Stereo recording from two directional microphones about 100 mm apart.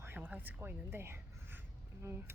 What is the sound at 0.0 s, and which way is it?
Speech, 20° right (ahead or behind).